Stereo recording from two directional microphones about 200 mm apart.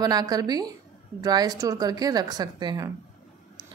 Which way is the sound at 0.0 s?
20° right (ahead or behind).